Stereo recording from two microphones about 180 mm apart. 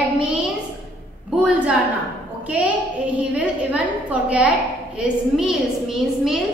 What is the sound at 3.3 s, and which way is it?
A woman's voice, 5° right (ahead or behind).